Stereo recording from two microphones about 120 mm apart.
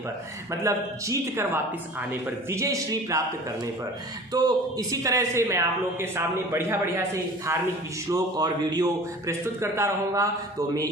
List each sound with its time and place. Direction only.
0.6 s a man's voice: 25° right (ahead or behind)
4.3 s a man's voice: 35° right (ahead or behind)
8.1 s a man's voice: 35° right (ahead or behind)
9.6 s a man's voice: 20° right (ahead or behind)